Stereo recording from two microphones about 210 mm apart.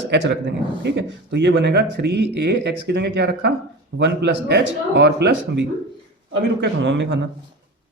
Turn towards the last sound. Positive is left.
turn(degrees=-55)  # may be behind; listen again after turning